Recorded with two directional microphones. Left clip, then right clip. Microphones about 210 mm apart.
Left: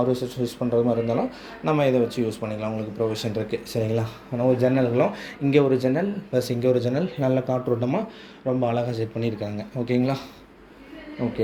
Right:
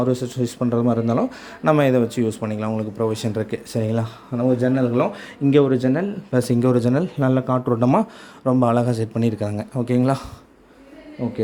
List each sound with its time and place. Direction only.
0.0 s a man's voice: 45° right (ahead or behind)